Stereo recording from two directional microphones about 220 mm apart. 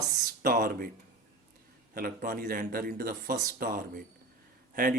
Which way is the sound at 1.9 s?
40° right (ahead or behind).